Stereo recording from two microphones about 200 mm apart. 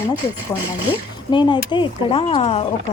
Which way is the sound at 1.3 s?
25° left (ahead or behind).